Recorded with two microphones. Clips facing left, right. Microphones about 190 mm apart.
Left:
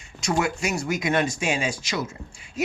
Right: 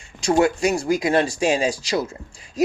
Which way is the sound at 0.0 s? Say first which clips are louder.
Right 7 dB; 30° right (ahead or behind).